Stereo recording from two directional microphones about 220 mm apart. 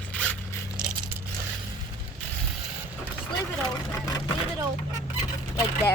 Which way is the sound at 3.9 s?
15° left (ahead or behind).